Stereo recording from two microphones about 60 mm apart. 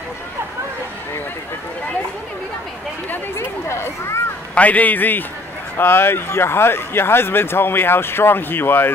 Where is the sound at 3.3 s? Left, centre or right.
Left.